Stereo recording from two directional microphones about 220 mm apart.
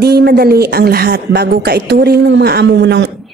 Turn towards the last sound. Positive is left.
turn(degrees=-55)  # may be behind; listen again after turning